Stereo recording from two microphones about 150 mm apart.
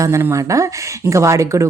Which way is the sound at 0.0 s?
20° right (ahead or behind).